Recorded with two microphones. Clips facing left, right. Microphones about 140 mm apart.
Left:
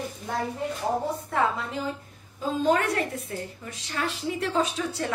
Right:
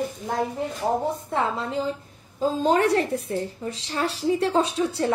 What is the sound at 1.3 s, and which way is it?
A woman's voice, 25° right (ahead or behind).